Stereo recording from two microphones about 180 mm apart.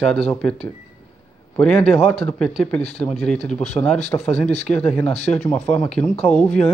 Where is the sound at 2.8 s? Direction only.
35° left (ahead or behind).